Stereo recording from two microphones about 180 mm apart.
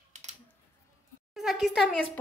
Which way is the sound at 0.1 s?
40° right (ahead or behind).